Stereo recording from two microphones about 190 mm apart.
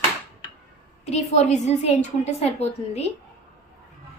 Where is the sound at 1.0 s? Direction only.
35° left (ahead or behind).